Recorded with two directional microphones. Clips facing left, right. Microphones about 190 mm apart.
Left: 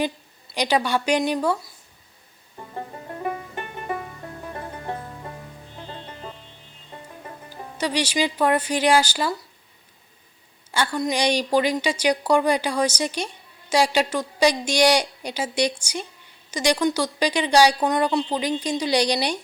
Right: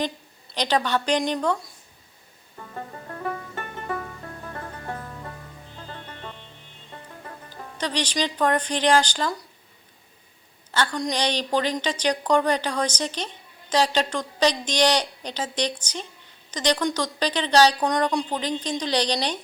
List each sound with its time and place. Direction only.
0.5 s a woman's voice: 10° left (ahead or behind)
2.7 s banjo: 20° left (ahead or behind)
4.4 s music: 20° left (ahead or behind)
6.9 s speech: 15° left (ahead or behind)
10.7 s a woman's voice: 10° left (ahead or behind)